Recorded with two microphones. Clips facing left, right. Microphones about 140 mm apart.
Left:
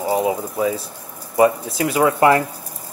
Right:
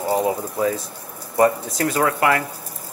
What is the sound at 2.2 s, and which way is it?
Speech, 25° left (ahead or behind).